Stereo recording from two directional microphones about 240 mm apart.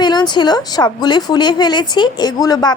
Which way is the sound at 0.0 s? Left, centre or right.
Centre.